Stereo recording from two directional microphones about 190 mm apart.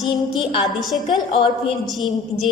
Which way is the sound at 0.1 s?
25° left (ahead or behind).